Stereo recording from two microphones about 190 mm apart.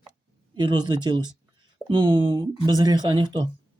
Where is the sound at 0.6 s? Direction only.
25° right (ahead or behind).